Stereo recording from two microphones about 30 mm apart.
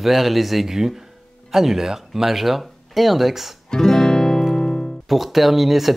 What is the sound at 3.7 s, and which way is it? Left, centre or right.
Guitar, centre.